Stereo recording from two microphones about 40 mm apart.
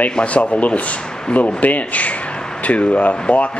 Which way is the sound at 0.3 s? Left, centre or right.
Left.